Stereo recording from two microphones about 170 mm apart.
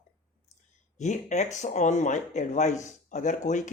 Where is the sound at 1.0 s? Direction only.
45° left (ahead or behind).